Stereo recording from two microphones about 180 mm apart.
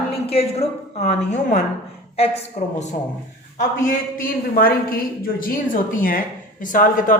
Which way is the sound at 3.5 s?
50° left (ahead or behind).